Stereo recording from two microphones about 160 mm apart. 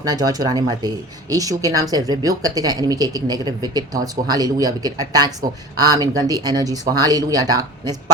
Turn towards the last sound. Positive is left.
turn(degrees=-25)  # may be behind; listen again after turning